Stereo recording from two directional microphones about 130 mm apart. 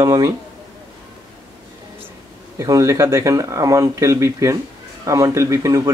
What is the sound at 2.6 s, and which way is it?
Speech, 20° right (ahead or behind).